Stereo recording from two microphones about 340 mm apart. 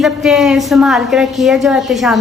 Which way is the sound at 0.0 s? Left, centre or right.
Centre.